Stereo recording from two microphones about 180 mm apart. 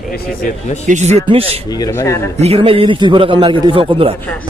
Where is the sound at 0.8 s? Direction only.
40° right (ahead or behind).